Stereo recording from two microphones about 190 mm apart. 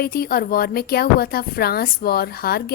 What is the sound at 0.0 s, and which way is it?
A woman's voice, 50° left (ahead or behind).